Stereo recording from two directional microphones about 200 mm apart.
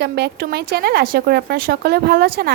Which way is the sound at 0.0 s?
55° right (ahead or behind).